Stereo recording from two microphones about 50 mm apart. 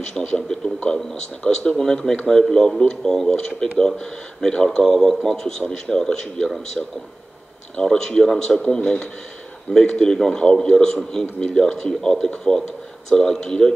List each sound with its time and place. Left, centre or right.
0.1 s speech: centre
7.7 s speech: centre